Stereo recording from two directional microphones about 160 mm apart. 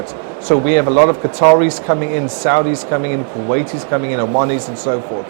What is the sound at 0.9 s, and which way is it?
Speech, 25° right (ahead or behind).